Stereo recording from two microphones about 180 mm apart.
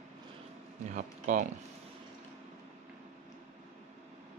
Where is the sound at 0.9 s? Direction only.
45° right (ahead or behind).